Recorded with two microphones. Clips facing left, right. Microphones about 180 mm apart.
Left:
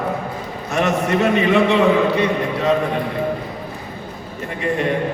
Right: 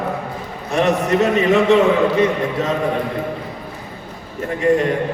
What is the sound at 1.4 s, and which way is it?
Speech, 40° right (ahead or behind).